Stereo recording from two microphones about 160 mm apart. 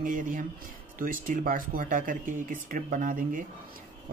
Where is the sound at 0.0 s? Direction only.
55° right (ahead or behind).